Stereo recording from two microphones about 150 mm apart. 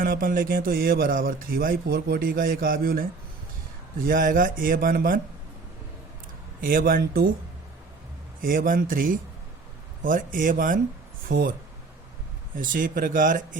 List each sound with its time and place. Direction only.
0.0 s speech: 75° right (ahead or behind)
6.6 s speech: 70° right (ahead or behind)
8.4 s speech: 70° right (ahead or behind)
12.5 s speech: 65° right (ahead or behind)